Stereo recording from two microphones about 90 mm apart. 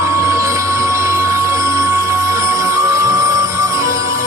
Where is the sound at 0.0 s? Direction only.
35° right (ahead or behind).